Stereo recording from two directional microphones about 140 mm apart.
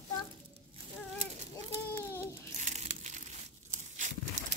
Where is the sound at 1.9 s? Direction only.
15° left (ahead or behind).